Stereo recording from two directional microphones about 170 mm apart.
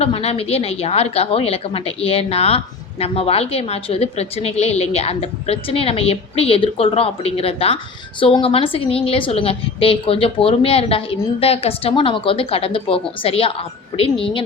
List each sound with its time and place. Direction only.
0.0 s a woman's voice: 35° left (ahead or behind)